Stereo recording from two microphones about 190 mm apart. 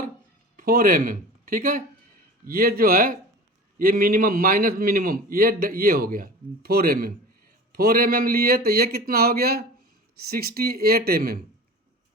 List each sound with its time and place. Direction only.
0.5 s a man's voice: 50° right (ahead or behind)